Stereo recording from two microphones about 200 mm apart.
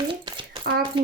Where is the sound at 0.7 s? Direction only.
45° right (ahead or behind).